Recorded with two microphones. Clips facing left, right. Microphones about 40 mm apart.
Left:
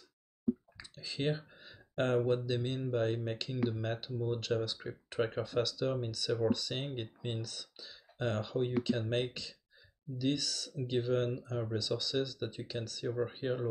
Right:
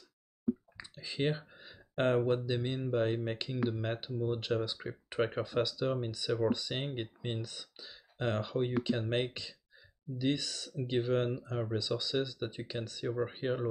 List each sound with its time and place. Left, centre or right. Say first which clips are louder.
0.7 s clicking: right 3 dB; centre
1.5 s a sound: right 1 dB; centre
2.0 s speech: right 1 dB; right